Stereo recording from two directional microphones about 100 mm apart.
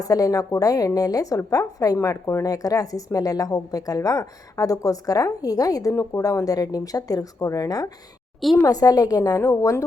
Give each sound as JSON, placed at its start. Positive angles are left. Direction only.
{"t": 0.0, "sound": "a woman's voice", "side_deg": 35}